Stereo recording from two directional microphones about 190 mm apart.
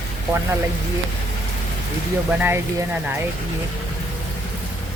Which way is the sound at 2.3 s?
10° right (ahead or behind).